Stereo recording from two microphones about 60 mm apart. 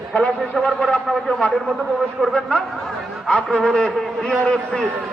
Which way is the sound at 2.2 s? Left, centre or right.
Centre.